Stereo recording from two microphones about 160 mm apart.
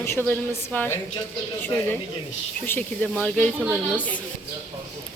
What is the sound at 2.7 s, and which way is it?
A woman's voice, 10° left (ahead or behind).